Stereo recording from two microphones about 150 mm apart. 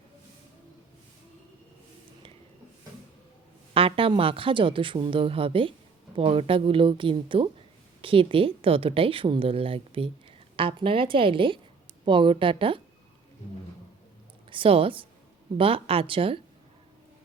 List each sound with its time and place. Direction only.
3.8 s speech: 35° right (ahead or behind)
14.5 s speech: 35° right (ahead or behind)